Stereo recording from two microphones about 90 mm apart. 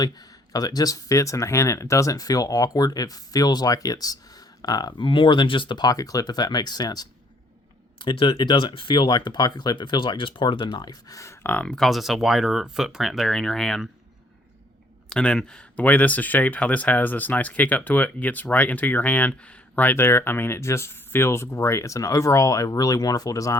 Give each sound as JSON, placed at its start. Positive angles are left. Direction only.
{"t": 0.0, "sound": "speech", "side_deg": 45}
{"t": 7.9, "sound": "speech", "side_deg": 65}
{"t": 11.4, "sound": "speech", "side_deg": 15}
{"t": 11.9, "sound": "speech", "side_deg": 0}
{"t": 15.1, "sound": "speech", "side_deg": 10}